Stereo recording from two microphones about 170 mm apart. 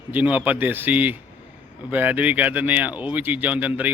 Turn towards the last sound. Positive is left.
turn(degrees=-10)  # may be behind; listen again after turning